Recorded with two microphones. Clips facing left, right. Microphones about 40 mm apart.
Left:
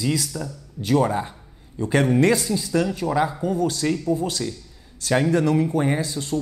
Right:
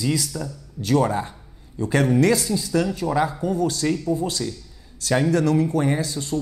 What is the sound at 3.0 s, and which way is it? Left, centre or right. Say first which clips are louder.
Speech: even; centre.